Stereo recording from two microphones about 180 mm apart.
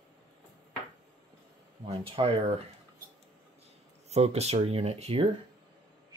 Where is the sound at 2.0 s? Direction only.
35° right (ahead or behind).